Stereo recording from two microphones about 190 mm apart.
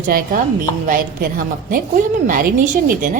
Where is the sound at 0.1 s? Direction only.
45° right (ahead or behind).